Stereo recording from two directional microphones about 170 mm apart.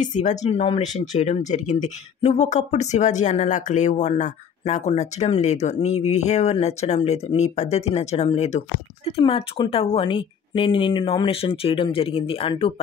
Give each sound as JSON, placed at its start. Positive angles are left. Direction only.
{"t": 0.0, "sound": "speech", "side_deg": 45}